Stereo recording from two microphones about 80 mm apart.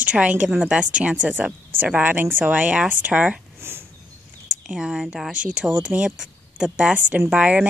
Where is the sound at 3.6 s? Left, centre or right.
Right.